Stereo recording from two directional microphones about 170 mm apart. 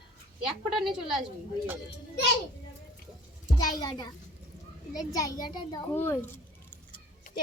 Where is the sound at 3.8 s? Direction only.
25° left (ahead or behind).